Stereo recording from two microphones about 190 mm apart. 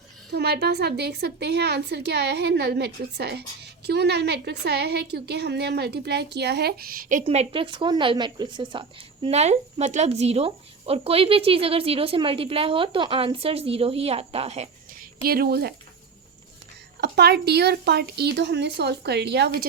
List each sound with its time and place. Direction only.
0.3 s a woman's voice: 60° right (ahead or behind)
7.3 s a woman's voice: 30° right (ahead or behind)
14.9 s a woman's voice: 50° right (ahead or behind)
17.0 s a woman's voice: 60° right (ahead or behind)